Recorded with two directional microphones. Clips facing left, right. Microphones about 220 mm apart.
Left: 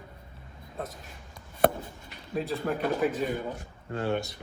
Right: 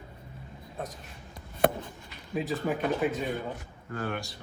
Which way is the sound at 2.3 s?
Centre (ahead or behind).